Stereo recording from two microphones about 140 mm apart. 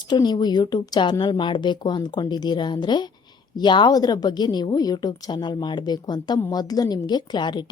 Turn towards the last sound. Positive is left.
turn(degrees=30)  # may be behind; listen again after turning